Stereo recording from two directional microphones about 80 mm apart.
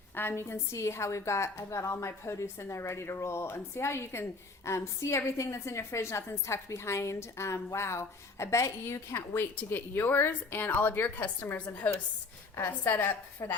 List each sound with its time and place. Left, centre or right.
0.2 s a woman's voice: left
13.4 s a woman's voice: left